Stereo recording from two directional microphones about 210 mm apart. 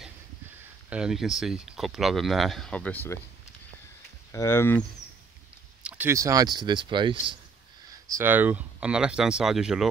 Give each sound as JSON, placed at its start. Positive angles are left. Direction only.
{"t": 0.0, "sound": "speech", "side_deg": -5}
{"t": 4.3, "sound": "speech", "side_deg": 15}
{"t": 5.8, "sound": "speech", "side_deg": -5}